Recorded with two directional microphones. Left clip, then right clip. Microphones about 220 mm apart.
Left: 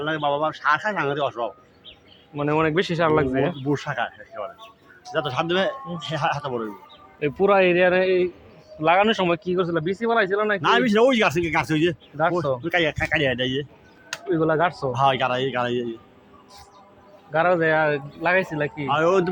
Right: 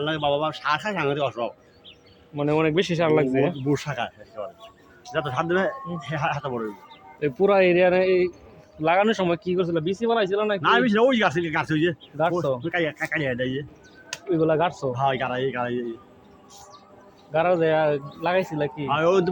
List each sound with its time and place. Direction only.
0.0 s speech: centre (ahead or behind)
5.1 s a man's voice: 30° left (ahead or behind)
7.2 s speech: 10° left (ahead or behind)
10.6 s a man's voice: 55° left (ahead or behind)
14.1 s speech: 15° left (ahead or behind)
14.9 s a man's voice: 45° left (ahead or behind)
17.3 s speech: 15° left (ahead or behind)
18.9 s a man's voice: 30° left (ahead or behind)